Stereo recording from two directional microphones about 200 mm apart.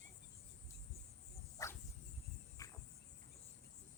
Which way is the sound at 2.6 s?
15° left (ahead or behind).